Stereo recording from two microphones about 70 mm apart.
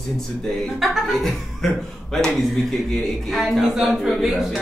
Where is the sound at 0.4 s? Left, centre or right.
Centre.